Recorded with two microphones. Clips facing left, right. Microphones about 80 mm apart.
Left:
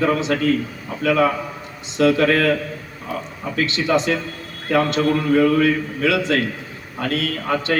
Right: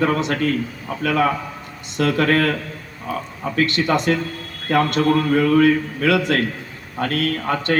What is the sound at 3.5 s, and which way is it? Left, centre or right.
A man's voice, right.